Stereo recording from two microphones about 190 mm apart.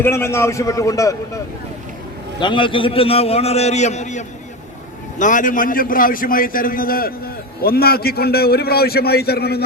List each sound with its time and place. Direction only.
0.0 s a man's voice: 15° left (ahead or behind)
2.4 s a man's voice: 25° left (ahead or behind); by 9.6 s 55° left (ahead or behind)